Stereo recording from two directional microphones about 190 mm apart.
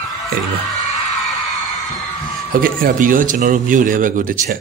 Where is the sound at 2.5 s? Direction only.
45° right (ahead or behind).